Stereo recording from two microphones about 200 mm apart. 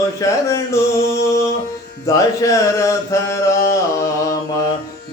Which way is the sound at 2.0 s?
15° left (ahead or behind).